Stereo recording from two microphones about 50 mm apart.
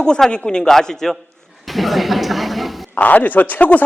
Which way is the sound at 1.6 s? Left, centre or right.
Centre.